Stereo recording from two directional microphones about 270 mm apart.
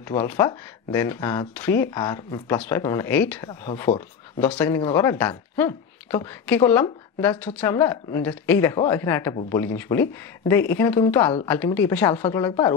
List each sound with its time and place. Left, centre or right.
0.1 s speech: centre